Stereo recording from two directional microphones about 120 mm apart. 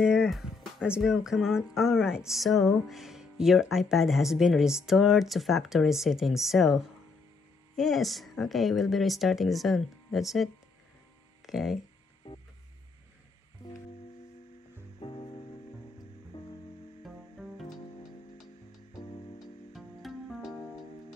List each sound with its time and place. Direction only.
0.0 s speech: 5° right (ahead or behind)
13.6 s music: 30° left (ahead or behind)
15.0 s music: 45° left (ahead or behind)
17.0 s music: centre (ahead or behind)
19.0 s music: 50° left (ahead or behind)
19.7 s music: centre (ahead or behind)